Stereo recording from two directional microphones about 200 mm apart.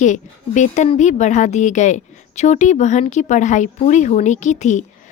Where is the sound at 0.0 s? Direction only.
35° left (ahead or behind).